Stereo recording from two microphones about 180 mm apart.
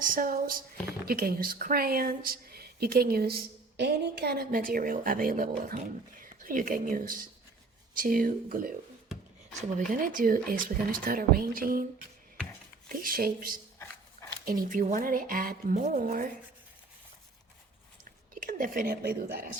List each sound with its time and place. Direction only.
0.0 s speech: 50° right (ahead or behind)
9.7 s speech: 45° right (ahead or behind)
12.9 s speech: 50° right (ahead or behind)
13.7 s dog: 15° left (ahead or behind)
14.4 s speech: 50° right (ahead or behind)
18.3 s speech: 50° right (ahead or behind)